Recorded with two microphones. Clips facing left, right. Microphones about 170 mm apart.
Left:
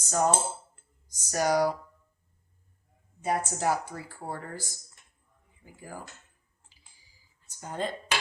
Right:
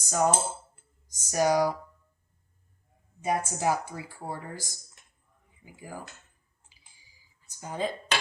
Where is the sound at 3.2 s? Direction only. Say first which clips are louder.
Right 1 dB; 15° right (ahead or behind).